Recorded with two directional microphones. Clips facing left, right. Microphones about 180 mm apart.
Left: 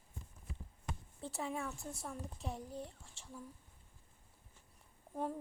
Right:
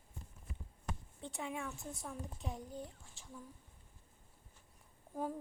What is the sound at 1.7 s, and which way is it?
Speech, 20° right (ahead or behind).